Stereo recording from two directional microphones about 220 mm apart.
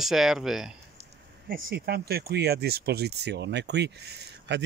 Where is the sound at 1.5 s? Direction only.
40° right (ahead or behind).